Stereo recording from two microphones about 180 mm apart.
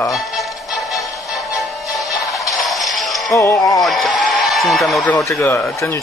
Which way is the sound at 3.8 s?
Centre (ahead or behind).